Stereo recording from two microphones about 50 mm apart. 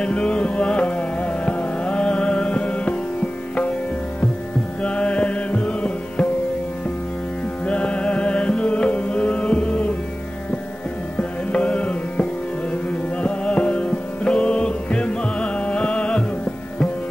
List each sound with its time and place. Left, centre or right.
0.0 s carnatic music: centre
4.8 s music: left
7.6 s music: left
11.1 s music: left